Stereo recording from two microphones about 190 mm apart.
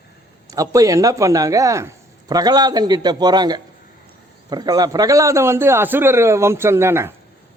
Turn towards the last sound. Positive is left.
turn(degrees=-15)  # may be behind; listen again after turning